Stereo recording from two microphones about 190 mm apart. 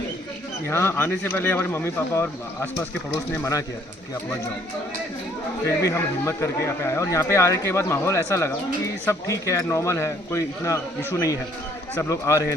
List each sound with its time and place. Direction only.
0.7 s speech: 15° left (ahead or behind)
5.6 s speech: 15° left (ahead or behind)